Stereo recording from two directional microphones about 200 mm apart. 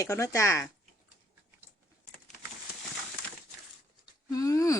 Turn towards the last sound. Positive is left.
turn(degrees=15)  # may be behind; listen again after turning